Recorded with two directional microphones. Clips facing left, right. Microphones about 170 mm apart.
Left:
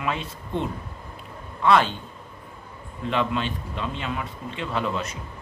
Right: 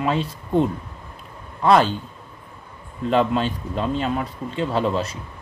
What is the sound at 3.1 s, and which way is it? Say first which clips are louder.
A man's voice: right 6 dB; 40° right (ahead or behind).